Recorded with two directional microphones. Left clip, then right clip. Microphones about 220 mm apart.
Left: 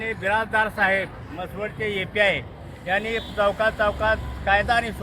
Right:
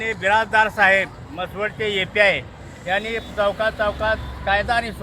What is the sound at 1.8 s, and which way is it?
Speech, 30° right (ahead or behind).